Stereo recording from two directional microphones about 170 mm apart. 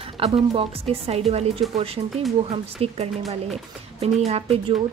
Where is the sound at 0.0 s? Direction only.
30° right (ahead or behind).